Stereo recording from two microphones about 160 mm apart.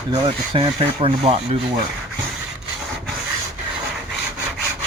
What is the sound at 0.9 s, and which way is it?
Rub, 40° right (ahead or behind).